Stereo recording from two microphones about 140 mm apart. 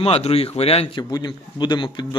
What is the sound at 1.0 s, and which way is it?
Speech, 30° left (ahead or behind).